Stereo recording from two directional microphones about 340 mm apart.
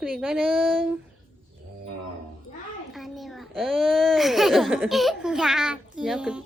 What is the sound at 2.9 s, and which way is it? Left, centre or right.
A child's voice, centre.